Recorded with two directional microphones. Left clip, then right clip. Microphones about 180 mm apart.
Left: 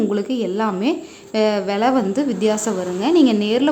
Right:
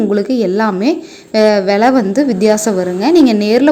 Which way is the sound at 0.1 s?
20° right (ahead or behind).